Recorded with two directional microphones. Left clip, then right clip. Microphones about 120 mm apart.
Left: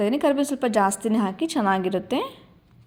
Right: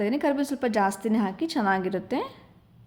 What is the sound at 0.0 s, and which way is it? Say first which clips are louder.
A woman's voice: left 4 dB; 15° left (ahead or behind).